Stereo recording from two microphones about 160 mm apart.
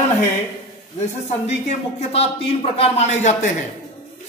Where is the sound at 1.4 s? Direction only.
45° left (ahead or behind).